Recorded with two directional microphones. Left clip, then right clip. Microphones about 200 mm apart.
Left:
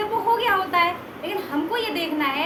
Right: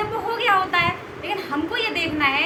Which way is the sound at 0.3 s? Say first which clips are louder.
Right 5 dB; 20° left (ahead or behind).